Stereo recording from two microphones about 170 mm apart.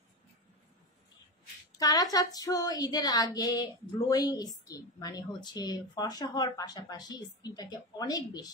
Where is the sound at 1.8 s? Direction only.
20° left (ahead or behind).